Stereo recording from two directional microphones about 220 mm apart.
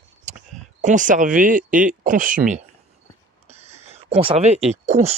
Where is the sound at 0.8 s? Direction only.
35° right (ahead or behind).